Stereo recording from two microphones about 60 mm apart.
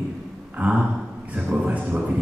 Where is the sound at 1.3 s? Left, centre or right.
Centre.